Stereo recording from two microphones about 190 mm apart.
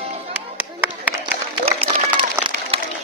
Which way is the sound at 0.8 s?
10° right (ahead or behind).